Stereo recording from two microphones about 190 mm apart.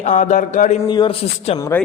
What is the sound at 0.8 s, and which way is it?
A man's voice, 25° left (ahead or behind).